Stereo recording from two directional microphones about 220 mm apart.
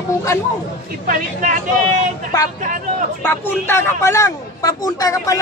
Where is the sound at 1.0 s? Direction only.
35° right (ahead or behind).